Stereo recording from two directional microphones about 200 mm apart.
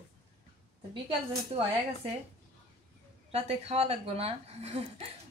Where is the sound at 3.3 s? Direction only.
30° right (ahead or behind).